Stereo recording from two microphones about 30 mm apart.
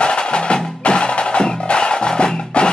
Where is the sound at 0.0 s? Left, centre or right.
Left.